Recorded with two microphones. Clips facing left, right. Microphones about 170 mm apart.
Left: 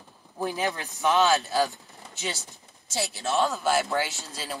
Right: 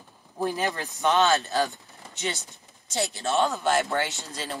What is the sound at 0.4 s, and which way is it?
Speech, centre (ahead or behind).